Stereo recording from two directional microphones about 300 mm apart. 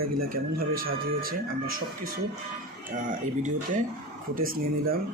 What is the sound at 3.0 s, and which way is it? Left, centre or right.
Speech, right.